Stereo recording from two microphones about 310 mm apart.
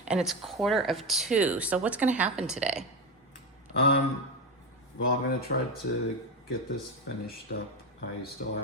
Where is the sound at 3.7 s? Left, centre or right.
Left.